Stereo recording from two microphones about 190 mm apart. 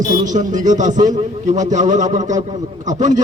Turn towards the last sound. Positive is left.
turn(degrees=-40)  # may be behind; listen again after turning